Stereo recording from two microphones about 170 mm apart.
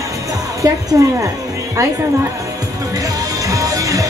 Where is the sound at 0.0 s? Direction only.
20° right (ahead or behind).